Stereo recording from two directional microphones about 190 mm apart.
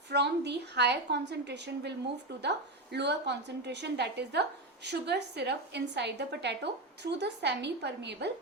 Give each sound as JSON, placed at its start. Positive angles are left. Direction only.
{"t": 0.1, "sound": "a woman's voice", "side_deg": -60}